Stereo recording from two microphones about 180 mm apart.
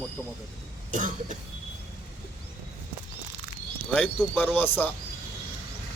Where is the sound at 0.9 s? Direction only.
45° right (ahead or behind).